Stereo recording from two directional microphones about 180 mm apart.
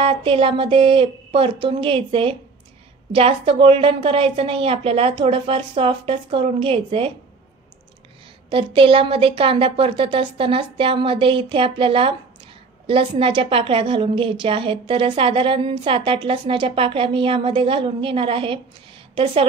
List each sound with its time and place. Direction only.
0.0 s a woman's voice: 30° right (ahead or behind)
8.5 s a woman's voice: 30° right (ahead or behind)